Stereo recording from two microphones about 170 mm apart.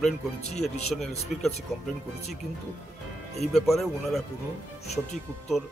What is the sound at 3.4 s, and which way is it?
Speech, centre (ahead or behind).